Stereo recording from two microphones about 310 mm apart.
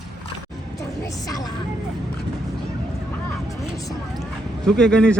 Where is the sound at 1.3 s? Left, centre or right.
Centre.